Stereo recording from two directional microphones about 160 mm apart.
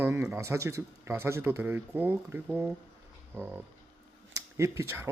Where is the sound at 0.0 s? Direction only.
15° right (ahead or behind).